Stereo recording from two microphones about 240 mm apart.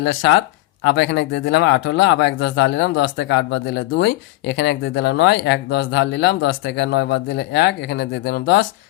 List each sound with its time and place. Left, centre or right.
0.0 s speech: left